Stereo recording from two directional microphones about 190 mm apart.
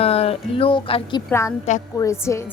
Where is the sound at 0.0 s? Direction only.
30° left (ahead or behind).